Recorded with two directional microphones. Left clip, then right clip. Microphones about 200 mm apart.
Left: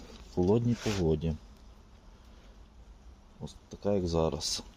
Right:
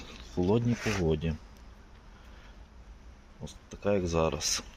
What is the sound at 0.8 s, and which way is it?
Speech, centre (ahead or behind).